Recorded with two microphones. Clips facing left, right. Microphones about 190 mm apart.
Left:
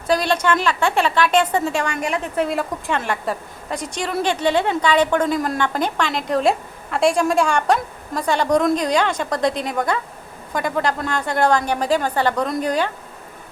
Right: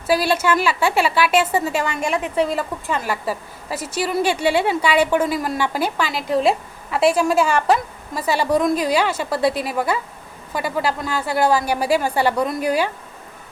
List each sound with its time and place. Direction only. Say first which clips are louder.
0.1 s a woman's voice: even; 5° right (ahead or behind)